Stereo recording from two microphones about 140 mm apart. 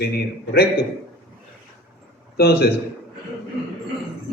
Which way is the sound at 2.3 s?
90° left.